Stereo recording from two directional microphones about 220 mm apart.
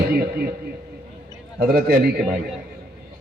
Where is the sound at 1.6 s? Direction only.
45° right (ahead or behind).